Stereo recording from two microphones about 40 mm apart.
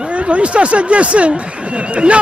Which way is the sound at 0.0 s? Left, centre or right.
Right.